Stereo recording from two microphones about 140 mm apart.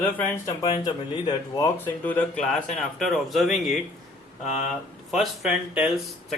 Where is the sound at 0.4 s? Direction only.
25° left (ahead or behind).